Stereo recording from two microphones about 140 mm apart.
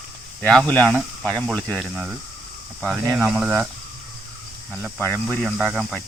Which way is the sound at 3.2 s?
5° right (ahead or behind).